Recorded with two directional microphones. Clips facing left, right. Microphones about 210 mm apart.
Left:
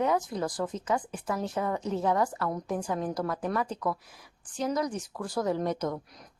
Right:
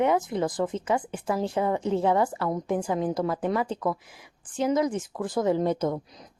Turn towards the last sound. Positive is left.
turn(degrees=-30)  # may be behind; listen again after turning